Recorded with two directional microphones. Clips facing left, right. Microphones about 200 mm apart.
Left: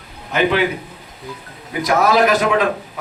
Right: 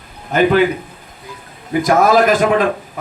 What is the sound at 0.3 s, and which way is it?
Speech, 50° right (ahead or behind).